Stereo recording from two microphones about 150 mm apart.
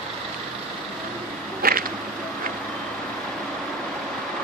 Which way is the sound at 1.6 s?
75° right (ahead or behind).